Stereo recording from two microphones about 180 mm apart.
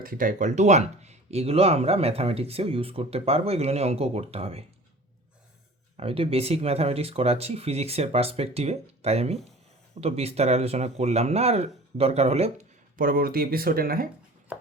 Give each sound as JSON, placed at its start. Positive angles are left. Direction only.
{"t": 0.0, "sound": "speech", "side_deg": -50}
{"t": 6.0, "sound": "speech", "side_deg": -30}
{"t": 13.0, "sound": "speech", "side_deg": -55}